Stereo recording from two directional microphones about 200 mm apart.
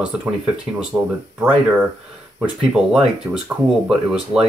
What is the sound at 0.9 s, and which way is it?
Speech, 10° right (ahead or behind).